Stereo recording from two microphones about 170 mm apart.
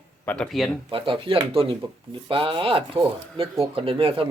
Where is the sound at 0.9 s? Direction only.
30° right (ahead or behind).